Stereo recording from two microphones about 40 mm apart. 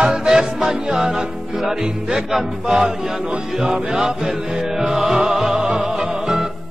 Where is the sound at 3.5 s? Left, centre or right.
Centre.